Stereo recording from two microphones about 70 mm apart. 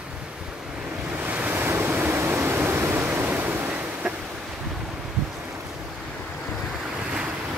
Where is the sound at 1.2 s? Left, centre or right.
Right.